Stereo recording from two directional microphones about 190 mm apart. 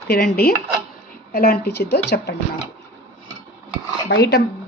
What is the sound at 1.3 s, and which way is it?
A woman's voice, 55° left (ahead or behind).